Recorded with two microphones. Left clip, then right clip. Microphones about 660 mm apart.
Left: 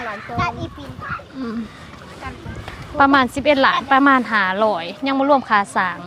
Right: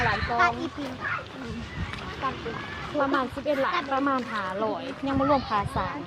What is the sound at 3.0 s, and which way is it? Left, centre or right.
A woman's voice, left.